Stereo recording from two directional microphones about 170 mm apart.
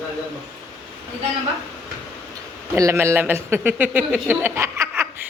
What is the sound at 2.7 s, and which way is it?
Speech, 15° right (ahead or behind).